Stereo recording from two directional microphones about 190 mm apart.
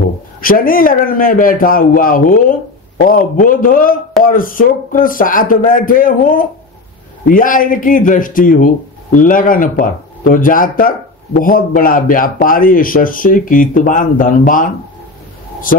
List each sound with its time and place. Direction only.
0.4 s speech: 50° left (ahead or behind)